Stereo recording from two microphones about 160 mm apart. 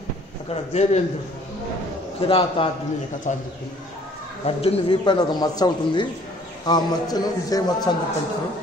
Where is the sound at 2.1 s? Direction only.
35° left (ahead or behind).